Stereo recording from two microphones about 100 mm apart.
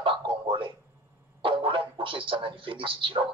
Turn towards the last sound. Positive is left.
turn(degrees=-60)  # may be behind; listen again after turning